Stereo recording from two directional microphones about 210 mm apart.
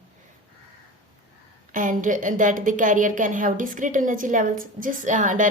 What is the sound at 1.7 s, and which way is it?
A woman's voice, 40° right (ahead or behind).